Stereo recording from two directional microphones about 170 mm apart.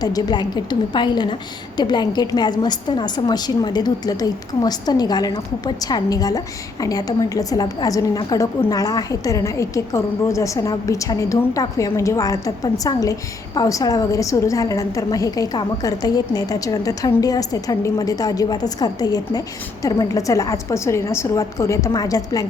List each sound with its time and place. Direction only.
0.0 s a woman's voice: 20° left (ahead or behind)